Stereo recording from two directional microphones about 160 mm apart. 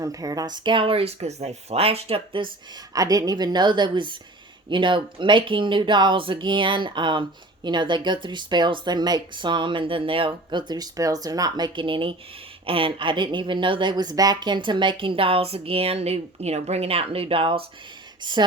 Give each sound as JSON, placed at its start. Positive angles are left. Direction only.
{"t": 0.0, "sound": "speech", "side_deg": -20}
{"t": 2.9, "sound": "speech", "side_deg": -20}